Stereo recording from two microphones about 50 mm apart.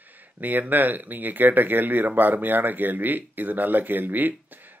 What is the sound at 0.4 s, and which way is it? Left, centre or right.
Speech, right.